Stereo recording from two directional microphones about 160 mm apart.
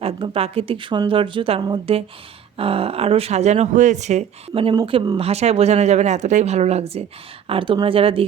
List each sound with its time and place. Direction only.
0.0 s speech: 35° right (ahead or behind)